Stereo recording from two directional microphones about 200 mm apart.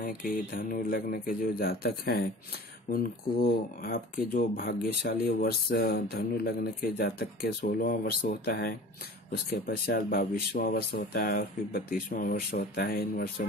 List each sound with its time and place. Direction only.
0.0 s speech: 45° left (ahead or behind)